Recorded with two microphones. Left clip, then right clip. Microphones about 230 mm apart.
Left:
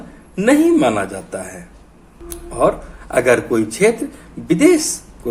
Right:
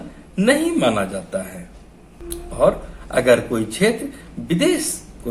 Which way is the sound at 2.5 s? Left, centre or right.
Left.